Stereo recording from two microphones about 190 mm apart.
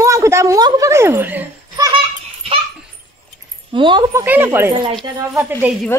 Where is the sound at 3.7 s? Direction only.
25° right (ahead or behind).